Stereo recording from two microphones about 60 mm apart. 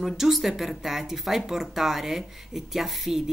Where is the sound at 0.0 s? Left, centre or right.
Centre.